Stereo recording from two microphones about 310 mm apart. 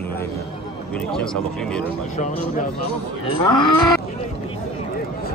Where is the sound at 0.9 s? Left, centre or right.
Centre.